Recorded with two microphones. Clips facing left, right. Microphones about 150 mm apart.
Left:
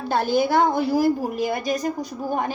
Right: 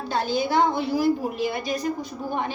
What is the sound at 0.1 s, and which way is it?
A woman's voice, 55° left (ahead or behind).